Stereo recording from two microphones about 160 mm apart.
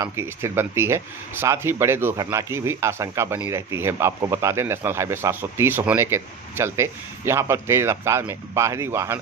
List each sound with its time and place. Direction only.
0.0 s speech: 15° right (ahead or behind)